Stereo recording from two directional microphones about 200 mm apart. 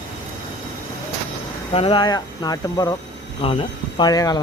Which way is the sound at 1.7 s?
25° left (ahead or behind).